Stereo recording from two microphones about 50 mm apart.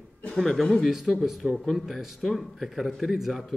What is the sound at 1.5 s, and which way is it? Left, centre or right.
A man's voice, centre.